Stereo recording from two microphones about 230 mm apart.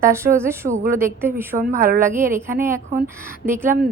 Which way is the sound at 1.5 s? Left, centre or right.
Right.